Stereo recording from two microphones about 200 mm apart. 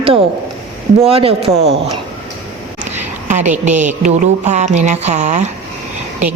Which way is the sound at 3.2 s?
40° right (ahead or behind).